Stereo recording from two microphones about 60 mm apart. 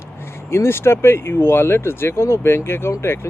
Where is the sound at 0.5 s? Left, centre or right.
Left.